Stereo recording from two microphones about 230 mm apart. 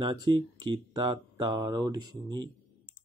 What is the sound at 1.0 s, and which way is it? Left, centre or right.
Speech, centre.